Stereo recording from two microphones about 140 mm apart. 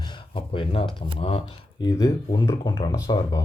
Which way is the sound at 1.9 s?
25° left (ahead or behind).